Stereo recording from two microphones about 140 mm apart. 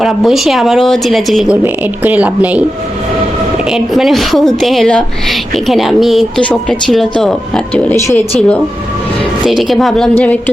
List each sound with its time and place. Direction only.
0.0 s a woman's voice: centre (ahead or behind)
1.6 s speech: 10° right (ahead or behind)
3.7 s a woman's voice: centre (ahead or behind)
7.9 s speech: 20° left (ahead or behind)
8.4 s a woman's voice: 10° left (ahead or behind)